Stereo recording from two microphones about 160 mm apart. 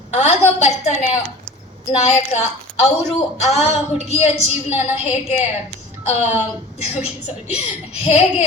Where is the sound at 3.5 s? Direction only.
40° left (ahead or behind).